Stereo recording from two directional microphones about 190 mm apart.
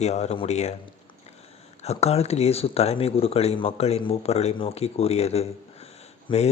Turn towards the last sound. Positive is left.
turn(degrees=25)  # may be behind; listen again after turning